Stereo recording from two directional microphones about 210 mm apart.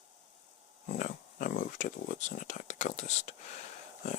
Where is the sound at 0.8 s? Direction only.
40° left (ahead or behind).